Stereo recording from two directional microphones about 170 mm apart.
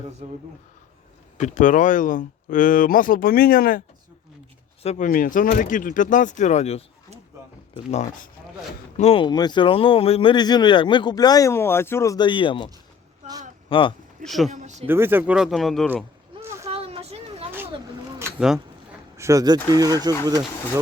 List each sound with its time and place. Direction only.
1.4 s speech: 45° left (ahead or behind)
4.8 s speech: 40° left (ahead or behind)
14.3 s speech: centre (ahead or behind)
14.5 s speech: 45° right (ahead or behind)
14.8 s speech: 15° right (ahead or behind)
16.6 s a sound: 35° right (ahead or behind)
18.3 s speech: 5° right (ahead or behind)
19.1 s speech: 20° right (ahead or behind)